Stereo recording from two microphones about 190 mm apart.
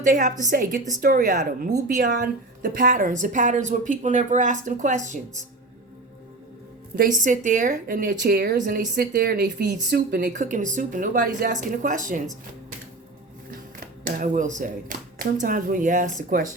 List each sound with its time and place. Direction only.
0.0 s speech: 45° right (ahead or behind)
6.9 s speech: 45° right (ahead or behind)
13.5 s speech: 50° right (ahead or behind)